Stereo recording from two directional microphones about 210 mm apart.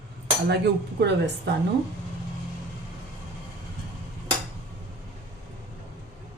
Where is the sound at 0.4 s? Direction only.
55° right (ahead or behind).